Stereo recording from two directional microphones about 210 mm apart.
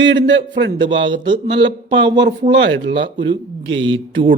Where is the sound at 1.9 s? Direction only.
20° right (ahead or behind).